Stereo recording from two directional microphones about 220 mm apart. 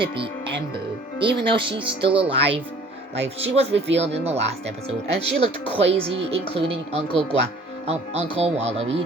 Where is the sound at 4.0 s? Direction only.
30° right (ahead or behind).